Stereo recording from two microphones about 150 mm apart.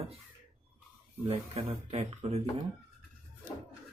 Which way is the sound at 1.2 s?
40° right (ahead or behind).